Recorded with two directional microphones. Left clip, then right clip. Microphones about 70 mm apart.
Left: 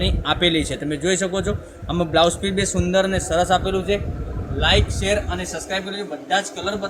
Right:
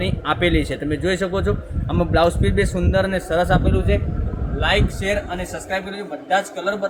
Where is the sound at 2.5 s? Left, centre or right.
Right.